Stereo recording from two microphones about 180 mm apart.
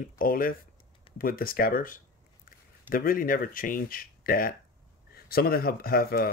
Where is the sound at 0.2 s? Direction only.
55° left (ahead or behind).